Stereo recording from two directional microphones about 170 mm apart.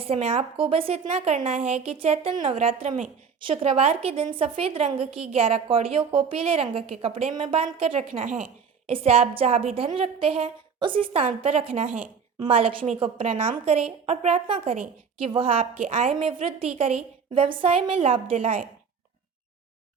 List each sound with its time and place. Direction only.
0.0 s a woman's voice: 35° right (ahead or behind)
8.2 s a woman's voice: 50° right (ahead or behind)
8.9 s a woman's voice: 35° right (ahead or behind)
15.9 s a woman's voice: 50° right (ahead or behind)
16.1 s a woman's voice: 35° right (ahead or behind)
18.3 s a woman's voice: 50° right (ahead or behind)